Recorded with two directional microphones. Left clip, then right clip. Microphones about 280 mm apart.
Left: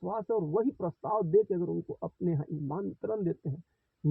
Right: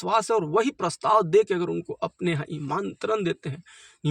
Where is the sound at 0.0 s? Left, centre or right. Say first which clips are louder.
Right 9 dB; right.